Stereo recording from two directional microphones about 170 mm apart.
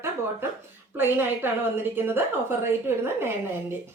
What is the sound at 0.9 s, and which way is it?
A woman's voice, 10° right (ahead or behind).